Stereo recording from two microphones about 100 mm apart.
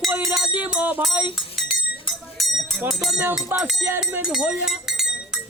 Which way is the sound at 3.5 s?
20° right (ahead or behind).